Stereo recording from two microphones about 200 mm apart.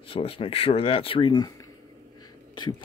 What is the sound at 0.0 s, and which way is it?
Speech, 30° left (ahead or behind).